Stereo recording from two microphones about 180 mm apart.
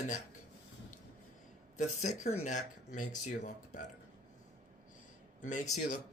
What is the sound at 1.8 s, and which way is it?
Speech, 40° left (ahead or behind).